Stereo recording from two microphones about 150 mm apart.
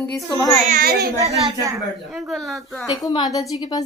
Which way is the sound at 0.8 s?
90° right.